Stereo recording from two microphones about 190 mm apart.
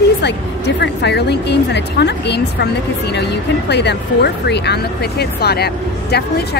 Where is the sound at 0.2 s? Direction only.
60° left (ahead or behind).